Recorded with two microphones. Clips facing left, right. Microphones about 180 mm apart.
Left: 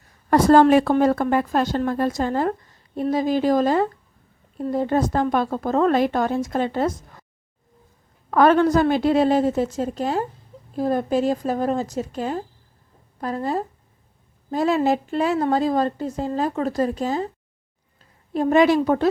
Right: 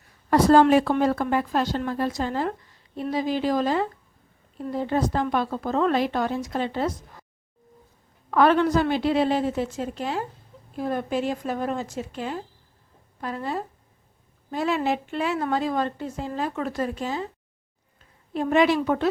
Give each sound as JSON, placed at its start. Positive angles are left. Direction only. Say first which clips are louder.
{"t": 0.3, "sound": "speech", "louder": "left 3 dB", "side_deg": 50}
{"t": 8.3, "sound": "a woman's voice", "louder": "left 3 dB", "side_deg": 45}
{"t": 18.3, "sound": "a woman's voice", "louder": "left 4 dB", "side_deg": 40}